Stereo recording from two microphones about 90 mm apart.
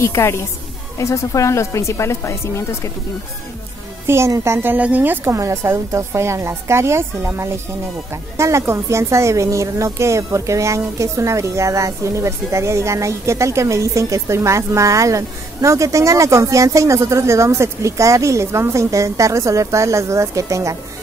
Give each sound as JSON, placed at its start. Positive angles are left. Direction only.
{"t": 0.0, "sound": "speech", "side_deg": 30}
{"t": 4.1, "sound": "a woman's voice", "side_deg": -30}
{"t": 4.7, "sound": "a woman's voice", "side_deg": -20}
{"t": 5.3, "sound": "speech", "side_deg": -30}